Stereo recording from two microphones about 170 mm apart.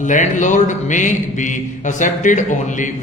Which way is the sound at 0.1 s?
45° left (ahead or behind).